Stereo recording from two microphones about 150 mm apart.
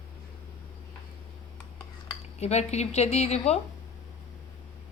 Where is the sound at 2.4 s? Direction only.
45° left (ahead or behind).